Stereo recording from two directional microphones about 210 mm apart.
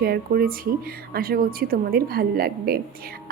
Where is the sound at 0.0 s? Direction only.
45° right (ahead or behind).